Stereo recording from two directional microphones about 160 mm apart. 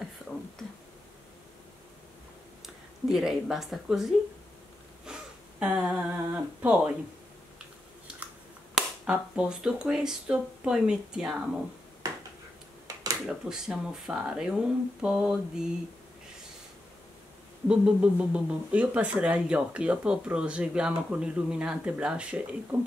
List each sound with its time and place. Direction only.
2.6 s speech: centre (ahead or behind)
5.1 s a sound: 5° right (ahead or behind)
5.6 s speech: 5° right (ahead or behind)
8.7 s speech: 5° right (ahead or behind)
12.8 s a sound: 20° right (ahead or behind)
13.3 s speech: centre (ahead or behind)
17.6 s speech: 5° right (ahead or behind)